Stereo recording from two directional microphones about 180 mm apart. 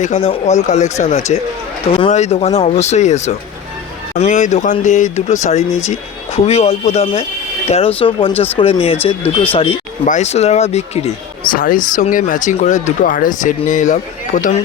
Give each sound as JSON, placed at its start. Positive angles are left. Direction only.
{"t": 0.0, "sound": "speech", "side_deg": 35}
{"t": 9.2, "sound": "speech", "side_deg": 10}
{"t": 10.1, "sound": "speech", "side_deg": 40}
{"t": 11.5, "sound": "speech", "side_deg": 50}